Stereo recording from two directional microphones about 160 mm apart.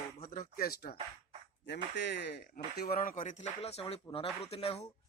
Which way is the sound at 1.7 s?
90° left.